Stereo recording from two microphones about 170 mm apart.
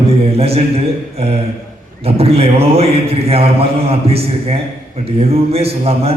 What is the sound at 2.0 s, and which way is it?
A man's voice, 35° right (ahead or behind).